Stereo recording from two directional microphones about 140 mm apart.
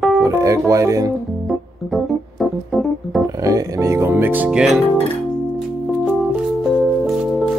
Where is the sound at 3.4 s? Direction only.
20° right (ahead or behind); by 4.8 s 5° right (ahead or behind).